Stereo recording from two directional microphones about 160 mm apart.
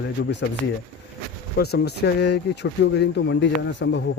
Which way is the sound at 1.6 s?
90° left.